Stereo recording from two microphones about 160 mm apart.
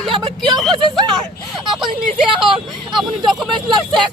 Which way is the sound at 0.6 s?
Centre (ahead or behind).